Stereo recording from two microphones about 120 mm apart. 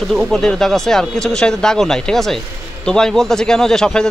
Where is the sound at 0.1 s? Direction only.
5° left (ahead or behind).